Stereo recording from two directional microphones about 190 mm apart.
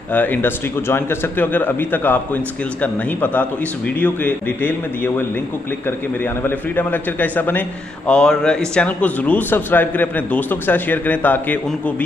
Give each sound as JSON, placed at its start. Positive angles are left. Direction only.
{"t": 0.1, "sound": "a man's voice", "side_deg": 10}
{"t": 6.4, "sound": "a man's voice", "side_deg": 10}